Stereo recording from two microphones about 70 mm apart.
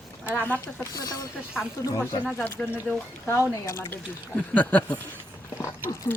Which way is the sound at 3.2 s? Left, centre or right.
Left.